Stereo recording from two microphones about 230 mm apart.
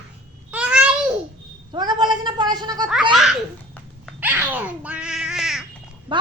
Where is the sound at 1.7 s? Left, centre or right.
Centre.